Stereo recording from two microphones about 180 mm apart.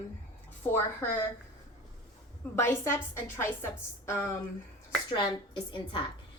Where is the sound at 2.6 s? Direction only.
15° left (ahead or behind).